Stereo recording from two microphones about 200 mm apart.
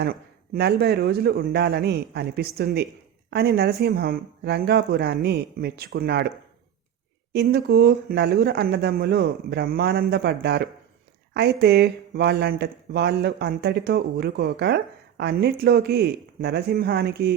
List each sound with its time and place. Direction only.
0.0 s speech: 50° right (ahead or behind)
7.3 s speech: 50° right (ahead or behind)